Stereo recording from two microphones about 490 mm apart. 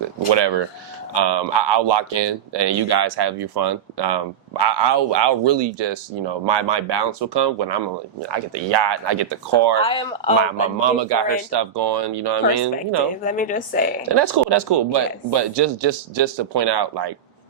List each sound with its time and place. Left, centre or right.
0.3 s speech: right
9.8 s speech: centre
10.8 s speech: right
13.2 s speech: centre
14.0 s speech: right